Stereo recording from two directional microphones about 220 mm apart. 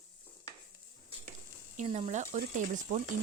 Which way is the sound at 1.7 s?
30° right (ahead or behind).